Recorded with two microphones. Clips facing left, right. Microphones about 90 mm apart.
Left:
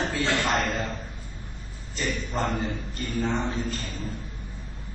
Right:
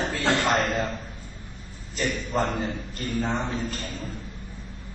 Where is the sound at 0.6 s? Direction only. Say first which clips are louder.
Right 2 dB; centre (ahead or behind).